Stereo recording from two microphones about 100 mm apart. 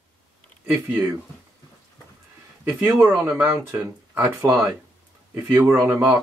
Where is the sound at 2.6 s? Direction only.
20° right (ahead or behind).